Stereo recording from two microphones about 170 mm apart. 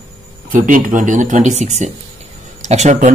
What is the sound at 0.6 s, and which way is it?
Speech, 50° right (ahead or behind).